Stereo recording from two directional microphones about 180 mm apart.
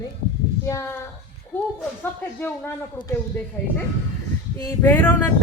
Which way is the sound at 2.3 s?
10° left (ahead or behind).